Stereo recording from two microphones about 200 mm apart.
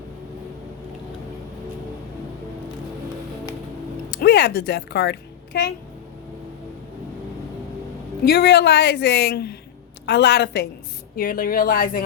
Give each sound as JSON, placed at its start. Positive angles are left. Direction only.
{"t": 4.1, "sound": "speech", "side_deg": 50}
{"t": 8.2, "sound": "a woman's voice", "side_deg": 50}